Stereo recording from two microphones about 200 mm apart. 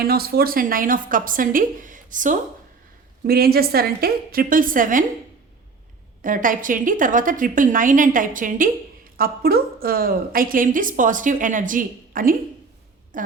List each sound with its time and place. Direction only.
0.0 s a woman's voice: 50° right (ahead or behind)
6.2 s a woman's voice: 40° right (ahead or behind)